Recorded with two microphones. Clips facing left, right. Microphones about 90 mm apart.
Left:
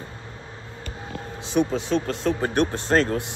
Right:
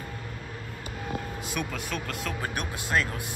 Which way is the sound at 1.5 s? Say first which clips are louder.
Left 13 dB; 30° left (ahead or behind).